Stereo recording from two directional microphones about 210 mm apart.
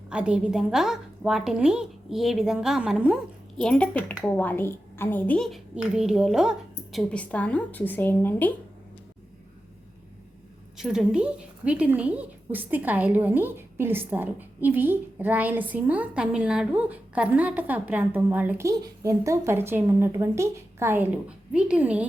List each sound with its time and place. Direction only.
0.1 s a woman's voice: 5° right (ahead or behind)
10.8 s a woman's voice: 5° right (ahead or behind)